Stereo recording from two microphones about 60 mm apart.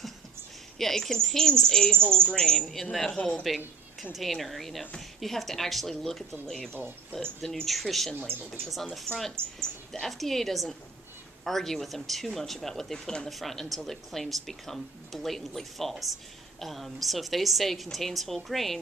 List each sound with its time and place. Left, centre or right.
0.7 s a woman's voice: centre
6.7 s speech: right
7.4 s a woman's voice: centre
8.1 s speech: centre
8.6 s a woman's voice: centre